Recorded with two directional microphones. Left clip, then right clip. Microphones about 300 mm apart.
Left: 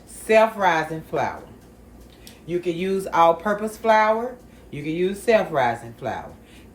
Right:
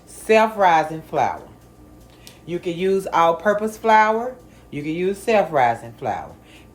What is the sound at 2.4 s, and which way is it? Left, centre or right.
Speech, centre.